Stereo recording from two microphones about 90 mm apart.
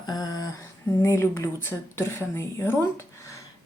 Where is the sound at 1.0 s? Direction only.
30° left (ahead or behind).